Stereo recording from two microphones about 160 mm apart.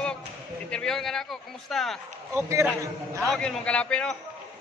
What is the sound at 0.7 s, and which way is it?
A man's voice, 5° left (ahead or behind).